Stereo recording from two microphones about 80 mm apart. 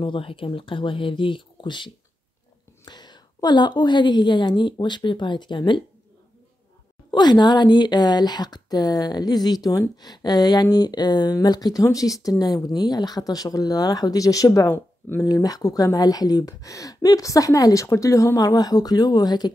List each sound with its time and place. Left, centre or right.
0.0 s speech: left
2.8 s a woman's voice: left
7.1 s a woman's voice: left
11.3 s speech: left
14.7 s speech: left
15.3 s speech: left